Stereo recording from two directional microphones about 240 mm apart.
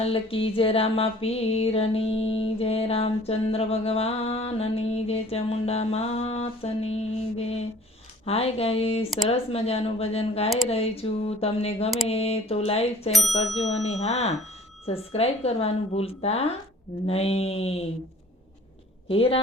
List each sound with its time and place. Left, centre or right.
0.0 s music: left
13.1 s speech: centre
14.0 s music: left
19.0 s speech: left